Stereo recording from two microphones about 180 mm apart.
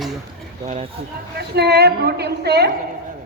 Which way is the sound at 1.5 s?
65° right (ahead or behind).